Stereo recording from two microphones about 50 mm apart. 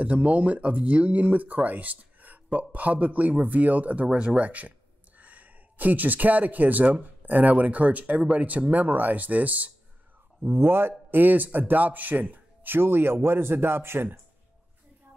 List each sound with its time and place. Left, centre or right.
0.0 s speech: right
4.1 s speech: right
10.5 s a man's voice: right